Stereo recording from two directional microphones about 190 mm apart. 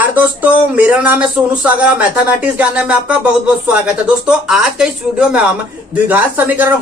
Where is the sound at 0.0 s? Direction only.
10° right (ahead or behind).